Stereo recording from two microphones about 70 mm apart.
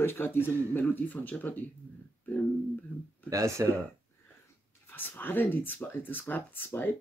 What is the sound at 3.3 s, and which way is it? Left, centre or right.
Speech, right.